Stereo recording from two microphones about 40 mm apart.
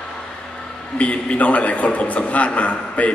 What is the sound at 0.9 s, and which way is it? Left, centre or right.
A man's voice, left.